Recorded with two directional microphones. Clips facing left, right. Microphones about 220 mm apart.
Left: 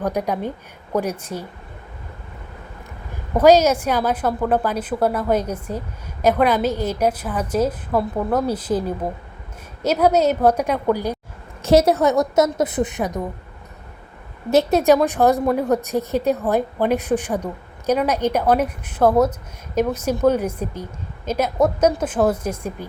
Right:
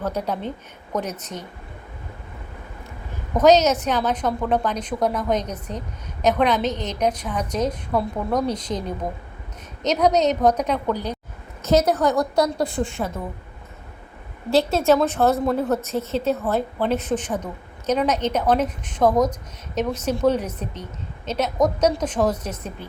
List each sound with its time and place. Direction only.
0.0 s a woman's voice: 15° left (ahead or behind)
3.3 s a woman's voice: 10° left (ahead or behind)
11.6 s a woman's voice: 30° left (ahead or behind)
14.5 s a woman's voice: 20° left (ahead or behind)